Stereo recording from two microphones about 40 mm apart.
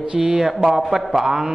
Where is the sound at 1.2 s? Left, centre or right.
Centre.